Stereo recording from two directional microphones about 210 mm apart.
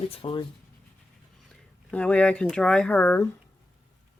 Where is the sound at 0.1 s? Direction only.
25° left (ahead or behind).